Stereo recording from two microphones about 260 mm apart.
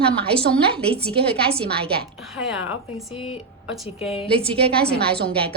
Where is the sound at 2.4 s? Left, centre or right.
Centre.